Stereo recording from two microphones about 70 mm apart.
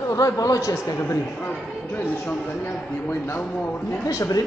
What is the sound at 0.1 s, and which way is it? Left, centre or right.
Speech, left.